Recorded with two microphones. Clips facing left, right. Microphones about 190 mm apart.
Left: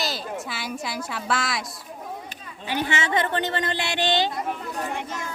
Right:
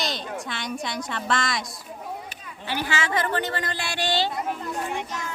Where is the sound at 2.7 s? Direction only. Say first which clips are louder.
Left 2 dB; 20° left (ahead or behind).